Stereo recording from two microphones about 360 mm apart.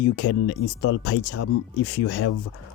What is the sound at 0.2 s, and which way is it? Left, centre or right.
Speech, left.